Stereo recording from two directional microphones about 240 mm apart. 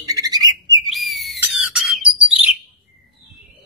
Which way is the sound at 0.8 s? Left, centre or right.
Centre.